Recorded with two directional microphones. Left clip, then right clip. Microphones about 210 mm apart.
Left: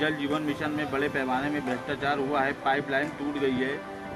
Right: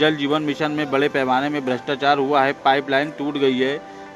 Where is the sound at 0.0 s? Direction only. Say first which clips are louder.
Right 9 dB; 30° right (ahead or behind).